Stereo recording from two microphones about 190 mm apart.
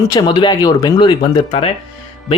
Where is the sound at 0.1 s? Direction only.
25° left (ahead or behind).